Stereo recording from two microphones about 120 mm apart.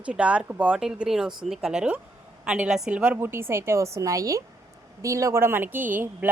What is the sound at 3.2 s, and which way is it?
A woman's voice, 20° right (ahead or behind).